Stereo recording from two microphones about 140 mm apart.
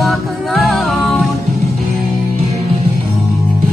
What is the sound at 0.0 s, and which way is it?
Music, centre (ahead or behind).